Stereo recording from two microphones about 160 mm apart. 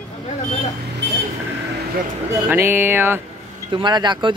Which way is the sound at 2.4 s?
10° right (ahead or behind).